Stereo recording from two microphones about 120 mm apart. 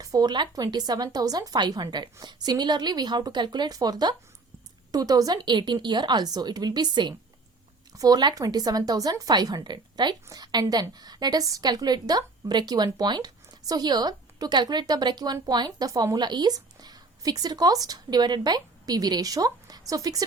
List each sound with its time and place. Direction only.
0.0 s a woman's voice: 30° right (ahead or behind)